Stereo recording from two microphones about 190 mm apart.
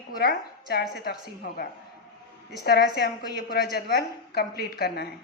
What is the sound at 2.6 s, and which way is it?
A woman's voice, 55° left (ahead or behind).